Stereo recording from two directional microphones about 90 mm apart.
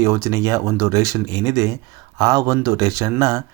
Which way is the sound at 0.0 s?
35° right (ahead or behind).